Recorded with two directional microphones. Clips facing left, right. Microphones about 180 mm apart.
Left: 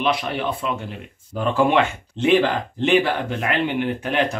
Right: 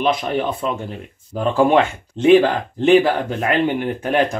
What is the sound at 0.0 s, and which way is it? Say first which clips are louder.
Speech: right 3 dB; 45° right (ahead or behind).